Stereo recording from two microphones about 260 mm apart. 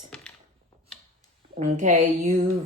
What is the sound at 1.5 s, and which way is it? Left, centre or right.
Speech, right.